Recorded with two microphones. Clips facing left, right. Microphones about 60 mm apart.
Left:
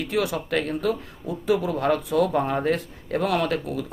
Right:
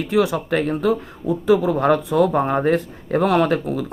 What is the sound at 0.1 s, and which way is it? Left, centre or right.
Speech, right.